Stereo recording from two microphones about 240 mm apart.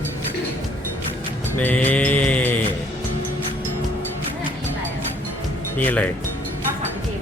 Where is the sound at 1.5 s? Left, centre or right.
Centre.